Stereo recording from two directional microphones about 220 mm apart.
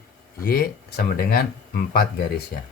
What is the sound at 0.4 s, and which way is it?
Speech, 40° left (ahead or behind).